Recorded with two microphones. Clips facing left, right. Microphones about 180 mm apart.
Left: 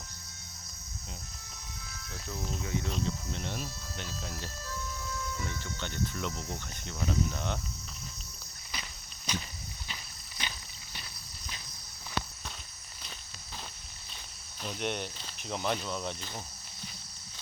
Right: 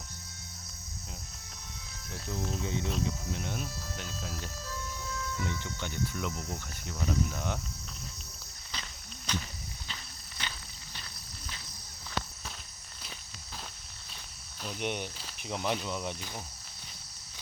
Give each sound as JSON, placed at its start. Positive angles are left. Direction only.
{"t": 2.6, "sound": "cricket", "side_deg": -20}
{"t": 3.0, "sound": "speech", "side_deg": -10}
{"t": 5.4, "sound": "cricket", "side_deg": -20}
{"t": 8.7, "sound": "walk", "side_deg": 10}
{"t": 14.6, "sound": "cricket", "side_deg": -5}